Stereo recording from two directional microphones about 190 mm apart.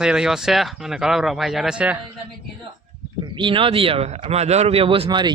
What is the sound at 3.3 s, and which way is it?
Speech, 25° right (ahead or behind).